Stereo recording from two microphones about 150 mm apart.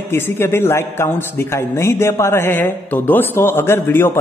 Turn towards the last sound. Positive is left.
turn(degrees=15)  # may be behind; listen again after turning